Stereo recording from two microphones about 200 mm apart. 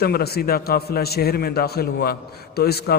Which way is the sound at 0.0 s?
50° left (ahead or behind).